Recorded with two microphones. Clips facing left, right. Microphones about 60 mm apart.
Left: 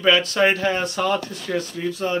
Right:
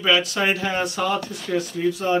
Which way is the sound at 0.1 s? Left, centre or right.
Centre.